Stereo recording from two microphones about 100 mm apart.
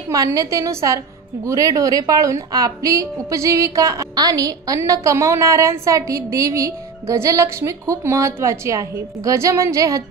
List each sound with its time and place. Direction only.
0.1 s a woman's voice: 35° right (ahead or behind)